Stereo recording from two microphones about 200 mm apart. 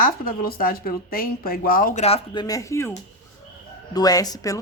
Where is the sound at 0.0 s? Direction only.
45° left (ahead or behind); by 2.9 s 15° left (ahead or behind).